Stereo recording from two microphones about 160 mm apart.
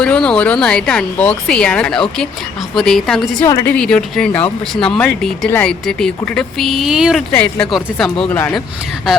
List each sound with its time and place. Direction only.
0.0 s speech: 5° left (ahead or behind)
3.4 s a woman's voice: 15° left (ahead or behind)
3.8 s speech: 5° left (ahead or behind)
7.3 s speech: 5° left (ahead or behind)
8.3 s a woman's voice: 15° left (ahead or behind)